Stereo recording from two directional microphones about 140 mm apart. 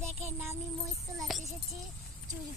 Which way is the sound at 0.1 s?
50° right (ahead or behind).